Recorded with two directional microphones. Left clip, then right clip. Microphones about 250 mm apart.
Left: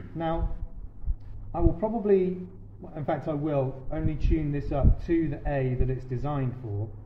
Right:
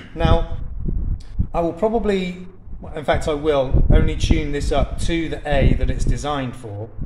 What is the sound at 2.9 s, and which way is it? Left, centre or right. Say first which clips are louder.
Speech: right 10 dB; right.